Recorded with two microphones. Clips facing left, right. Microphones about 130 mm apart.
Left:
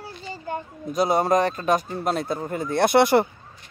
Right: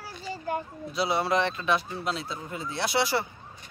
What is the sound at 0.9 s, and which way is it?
A man's voice, 45° left (ahead or behind).